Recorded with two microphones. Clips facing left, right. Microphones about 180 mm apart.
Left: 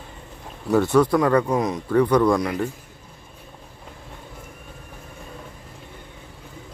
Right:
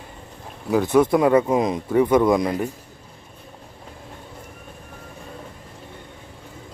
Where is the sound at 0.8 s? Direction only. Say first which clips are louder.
Right 1 dB; 20° right (ahead or behind).